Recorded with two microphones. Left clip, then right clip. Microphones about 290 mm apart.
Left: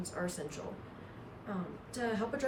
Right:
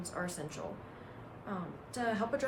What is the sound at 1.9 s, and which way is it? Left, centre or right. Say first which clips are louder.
Speech: right 2 dB; centre.